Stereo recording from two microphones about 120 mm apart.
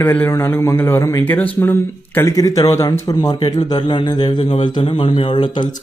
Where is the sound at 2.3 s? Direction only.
30° left (ahead or behind).